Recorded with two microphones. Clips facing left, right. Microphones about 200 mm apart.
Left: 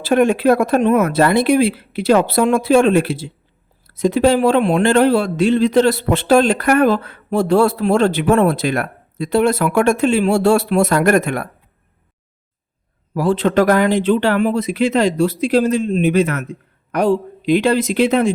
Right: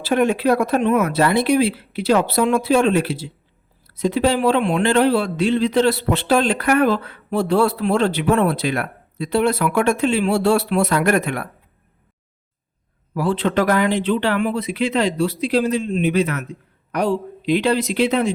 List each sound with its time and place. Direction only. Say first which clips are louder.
0.0 s a man's voice: left 4 dB; 50° left (ahead or behind)
13.1 s a man's voice: left 4 dB; 45° left (ahead or behind)